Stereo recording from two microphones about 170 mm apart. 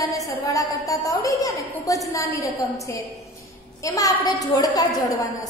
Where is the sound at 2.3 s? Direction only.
15° left (ahead or behind).